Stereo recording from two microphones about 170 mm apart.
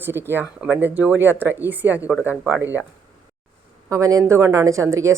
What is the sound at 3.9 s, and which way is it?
Speech, 20° right (ahead or behind).